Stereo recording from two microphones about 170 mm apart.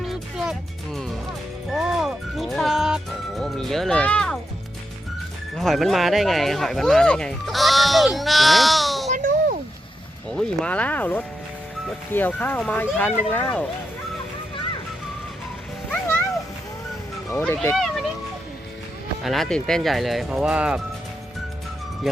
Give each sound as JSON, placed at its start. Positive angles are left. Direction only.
{"t": 0.0, "sound": "music", "side_deg": 0}
{"t": 1.7, "sound": "music", "side_deg": -5}
{"t": 5.5, "sound": "speech", "side_deg": 0}
{"t": 9.0, "sound": "a sound", "side_deg": -50}
{"t": 10.2, "sound": "speech", "side_deg": 5}
{"t": 17.2, "sound": "speech", "side_deg": 15}
{"t": 19.2, "sound": "speech", "side_deg": 0}
{"t": 22.0, "sound": "speech", "side_deg": 0}